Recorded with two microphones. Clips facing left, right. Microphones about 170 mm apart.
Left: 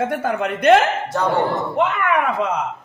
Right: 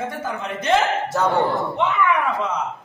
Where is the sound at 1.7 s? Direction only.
60° left (ahead or behind).